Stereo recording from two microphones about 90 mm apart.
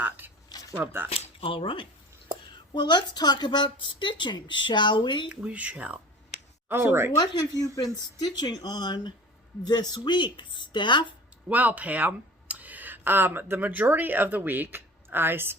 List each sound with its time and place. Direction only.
0.2 s a sound: 20° right (ahead or behind)
0.8 s speech: 15° right (ahead or behind)
1.1 s speech: 90° left; by 1.9 s 70° left (ahead or behind)
2.7 s a woman's voice: 55° left (ahead or behind)
5.3 s speech: 15° right (ahead or behind)
6.7 s speech: 25° right (ahead or behind)
7.2 s a woman's voice: 45° left (ahead or behind); by 11.1 s 60° left (ahead or behind)
11.4 s speech: 15° right (ahead or behind)